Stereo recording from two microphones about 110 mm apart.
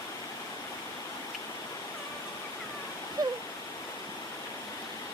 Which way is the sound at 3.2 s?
35° right (ahead or behind).